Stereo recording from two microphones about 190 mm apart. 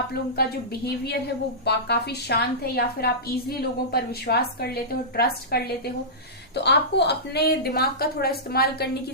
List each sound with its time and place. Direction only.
0.1 s a woman's voice: 55° left (ahead or behind)